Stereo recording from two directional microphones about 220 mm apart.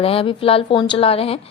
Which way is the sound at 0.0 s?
25° left (ahead or behind).